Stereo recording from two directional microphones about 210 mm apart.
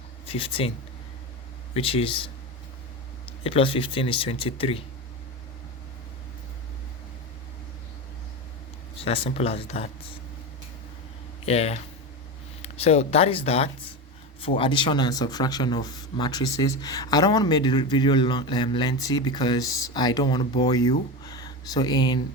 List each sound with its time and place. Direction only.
0.3 s speech: 25° left (ahead or behind)
1.7 s speech: 25° left (ahead or behind)
3.4 s speech: 25° left (ahead or behind)
9.0 s speech: 25° left (ahead or behind)
11.4 s speech: 30° left (ahead or behind)